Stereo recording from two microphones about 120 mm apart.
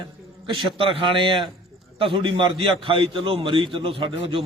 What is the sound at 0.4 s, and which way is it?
A man's voice, 45° right (ahead or behind).